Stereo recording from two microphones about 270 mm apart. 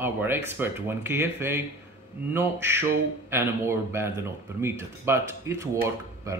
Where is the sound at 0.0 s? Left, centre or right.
Centre.